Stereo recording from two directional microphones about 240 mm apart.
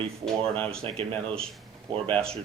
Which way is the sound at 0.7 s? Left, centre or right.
Right.